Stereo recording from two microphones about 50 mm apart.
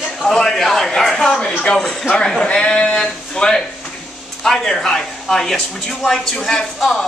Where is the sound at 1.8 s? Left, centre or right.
Centre.